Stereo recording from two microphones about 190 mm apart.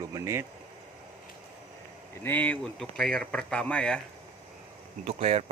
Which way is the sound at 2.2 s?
10° left (ahead or behind).